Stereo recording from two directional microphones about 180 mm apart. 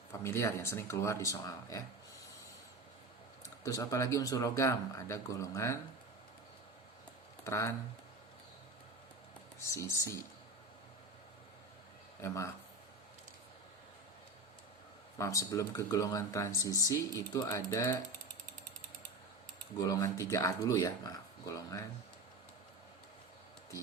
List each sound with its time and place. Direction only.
0.1 s speech: 15° left (ahead or behind)
3.6 s speech: 20° left (ahead or behind)
7.4 s speech: 15° left (ahead or behind)
9.6 s speech: 15° left (ahead or behind)
12.2 s speech: 15° left (ahead or behind)
15.2 s speech: 15° left (ahead or behind)
19.8 s speech: 20° left (ahead or behind)